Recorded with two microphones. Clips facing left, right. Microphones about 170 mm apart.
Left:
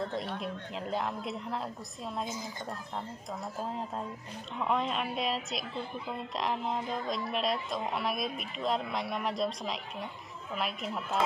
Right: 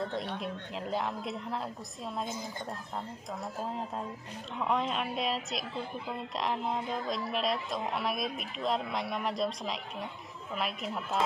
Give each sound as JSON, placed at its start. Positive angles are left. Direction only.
{"t": 0.0, "sound": "a woman's voice", "side_deg": 0}
{"t": 3.6, "sound": "a woman's voice", "side_deg": 0}